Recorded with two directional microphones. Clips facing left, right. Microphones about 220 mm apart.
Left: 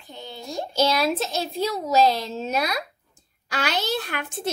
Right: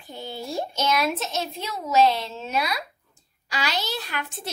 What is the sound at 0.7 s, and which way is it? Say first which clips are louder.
A woman's voice: left 5 dB; 35° left (ahead or behind).